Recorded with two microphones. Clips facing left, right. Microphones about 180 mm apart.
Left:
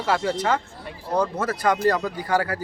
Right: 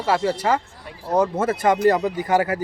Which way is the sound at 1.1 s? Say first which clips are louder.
Right 4 dB; 25° right (ahead or behind).